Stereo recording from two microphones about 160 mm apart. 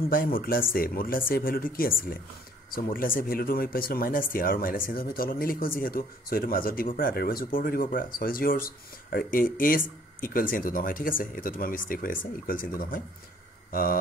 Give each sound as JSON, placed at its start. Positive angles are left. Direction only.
{"t": 0.1, "sound": "speech", "side_deg": 65}